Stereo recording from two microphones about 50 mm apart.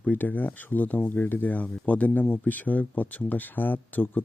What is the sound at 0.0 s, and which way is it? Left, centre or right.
Speech, left.